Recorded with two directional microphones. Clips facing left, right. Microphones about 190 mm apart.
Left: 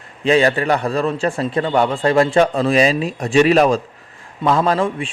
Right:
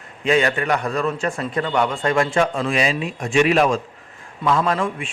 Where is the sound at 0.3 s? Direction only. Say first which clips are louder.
Left 4 dB; 35° left (ahead or behind).